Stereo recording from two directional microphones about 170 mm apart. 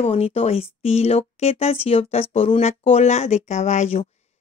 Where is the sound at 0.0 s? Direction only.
35° left (ahead or behind).